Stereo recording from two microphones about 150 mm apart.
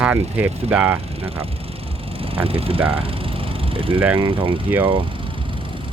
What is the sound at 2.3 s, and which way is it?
Speech, 40° right (ahead or behind).